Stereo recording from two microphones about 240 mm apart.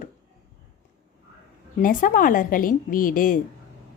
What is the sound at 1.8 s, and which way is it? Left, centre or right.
A woman's voice, left.